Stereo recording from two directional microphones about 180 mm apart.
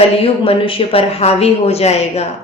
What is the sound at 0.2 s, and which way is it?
A woman's voice, 30° left (ahead or behind).